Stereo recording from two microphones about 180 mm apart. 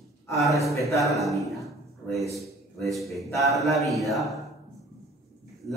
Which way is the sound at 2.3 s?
Centre (ahead or behind).